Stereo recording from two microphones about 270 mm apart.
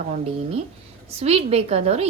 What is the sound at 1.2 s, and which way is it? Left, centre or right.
Speech, right.